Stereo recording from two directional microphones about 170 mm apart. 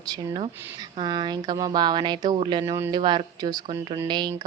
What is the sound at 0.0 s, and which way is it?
Speech, 20° right (ahead or behind).